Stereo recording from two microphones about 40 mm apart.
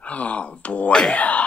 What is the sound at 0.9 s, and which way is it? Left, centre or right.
Speech, centre.